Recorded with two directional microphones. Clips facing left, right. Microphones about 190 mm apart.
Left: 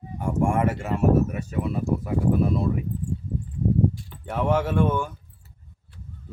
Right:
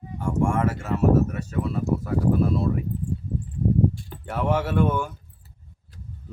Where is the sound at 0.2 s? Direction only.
15° left (ahead or behind).